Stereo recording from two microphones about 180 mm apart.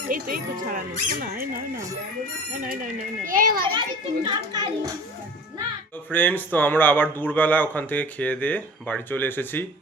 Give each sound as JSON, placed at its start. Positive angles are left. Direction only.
{"t": 0.1, "sound": "a child's voice", "side_deg": -50}
{"t": 2.6, "sound": "a child's voice", "side_deg": -50}
{"t": 3.6, "sound": "a child's voice", "side_deg": -25}
{"t": 6.1, "sound": "a man's voice", "side_deg": 10}